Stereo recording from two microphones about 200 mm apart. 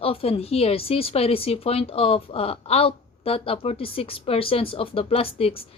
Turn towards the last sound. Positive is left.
turn(degrees=30)  # may be behind; listen again after turning